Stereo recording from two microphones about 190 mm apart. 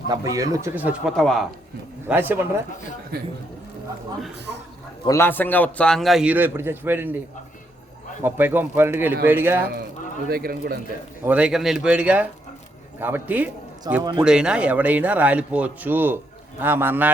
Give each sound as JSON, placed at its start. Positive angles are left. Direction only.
{"t": 0.1, "sound": "speech", "side_deg": -20}
{"t": 2.0, "sound": "speech", "side_deg": -10}
{"t": 5.0, "sound": "a man's voice", "side_deg": 15}
{"t": 8.2, "sound": "speech", "side_deg": -10}
{"t": 10.2, "sound": "speech", "side_deg": -55}
{"t": 11.2, "sound": "a man's voice", "side_deg": -5}
{"t": 13.9, "sound": "speech", "side_deg": -20}
{"t": 14.2, "sound": "speech", "side_deg": -5}